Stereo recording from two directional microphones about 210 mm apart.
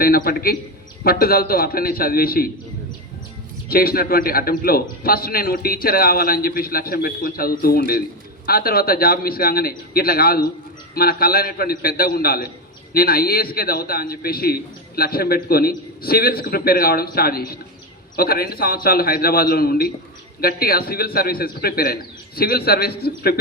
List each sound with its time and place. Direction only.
0.0 s a man's voice: 45° left (ahead or behind)
3.7 s a man's voice: 45° left (ahead or behind)